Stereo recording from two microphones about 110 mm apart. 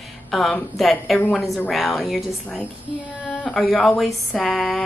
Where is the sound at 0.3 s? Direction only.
Centre (ahead or behind).